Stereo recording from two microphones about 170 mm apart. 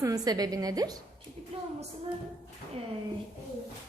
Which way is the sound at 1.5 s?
35° right (ahead or behind).